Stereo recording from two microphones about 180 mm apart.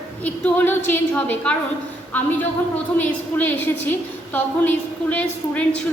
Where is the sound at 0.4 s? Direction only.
10° left (ahead or behind).